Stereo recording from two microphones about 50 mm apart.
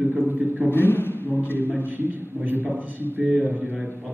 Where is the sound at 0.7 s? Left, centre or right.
Left.